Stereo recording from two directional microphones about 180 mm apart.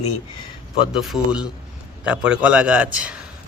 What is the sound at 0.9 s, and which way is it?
Speech, centre (ahead or behind).